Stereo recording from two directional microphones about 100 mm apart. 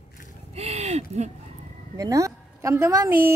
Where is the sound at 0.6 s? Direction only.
90° right.